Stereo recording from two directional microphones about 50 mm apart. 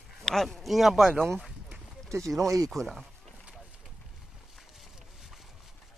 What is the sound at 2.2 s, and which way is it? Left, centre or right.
Speech, right.